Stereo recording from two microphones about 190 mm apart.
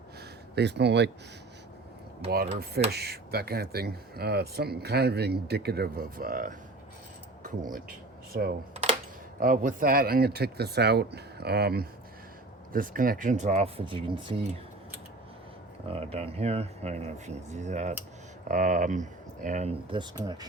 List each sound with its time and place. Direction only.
0.5 s speech: 60° right (ahead or behind)
2.2 s speech: 60° right (ahead or behind)
8.3 s speech: 50° right (ahead or behind); by 14.6 s 30° right (ahead or behind)
15.9 s speech: 30° right (ahead or behind)
20.1 s speech: 20° right (ahead or behind)